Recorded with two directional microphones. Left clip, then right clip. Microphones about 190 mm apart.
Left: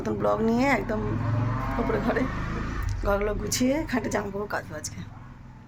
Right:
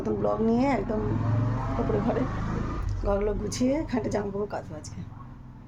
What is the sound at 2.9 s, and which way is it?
A woman's voice, 5° right (ahead or behind).